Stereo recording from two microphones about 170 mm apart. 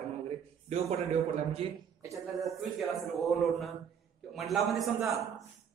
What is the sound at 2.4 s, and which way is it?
Speech, centre (ahead or behind).